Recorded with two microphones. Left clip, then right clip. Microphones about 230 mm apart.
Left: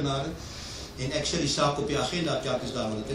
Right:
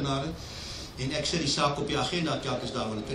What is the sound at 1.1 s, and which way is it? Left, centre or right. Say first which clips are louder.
A man's voice: left 1 dB; right.